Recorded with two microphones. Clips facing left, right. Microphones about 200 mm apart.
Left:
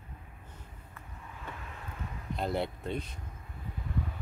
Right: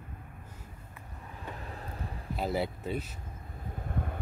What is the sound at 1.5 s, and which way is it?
Vehicle, 35° right (ahead or behind).